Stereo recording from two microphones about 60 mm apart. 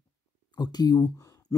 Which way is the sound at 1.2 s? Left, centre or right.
Left.